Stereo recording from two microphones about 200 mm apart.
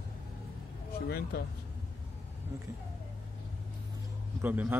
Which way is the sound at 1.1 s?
50° left (ahead or behind).